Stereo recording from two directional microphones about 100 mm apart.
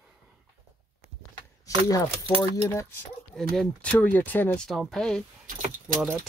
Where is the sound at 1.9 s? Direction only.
35° left (ahead or behind).